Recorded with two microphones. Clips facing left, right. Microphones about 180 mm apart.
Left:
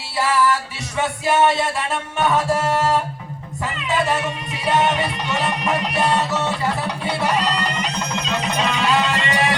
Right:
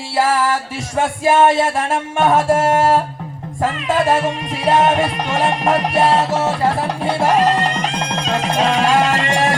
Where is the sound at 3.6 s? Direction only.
50° right (ahead or behind).